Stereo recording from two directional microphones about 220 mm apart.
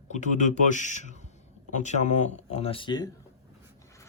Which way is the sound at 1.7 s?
35° left (ahead or behind).